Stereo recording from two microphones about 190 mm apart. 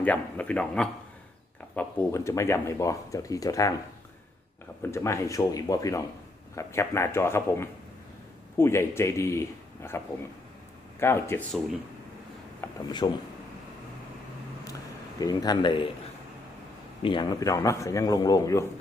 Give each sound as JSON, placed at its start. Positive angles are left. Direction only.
{"t": 0.0, "sound": "speech", "side_deg": 10}
{"t": 4.8, "sound": "speech", "side_deg": 15}
{"t": 11.0, "sound": "speech", "side_deg": 15}
{"t": 12.6, "sound": "a man's voice", "side_deg": 20}
{"t": 15.2, "sound": "a man's voice", "side_deg": 20}
{"t": 17.0, "sound": "a man's voice", "side_deg": 25}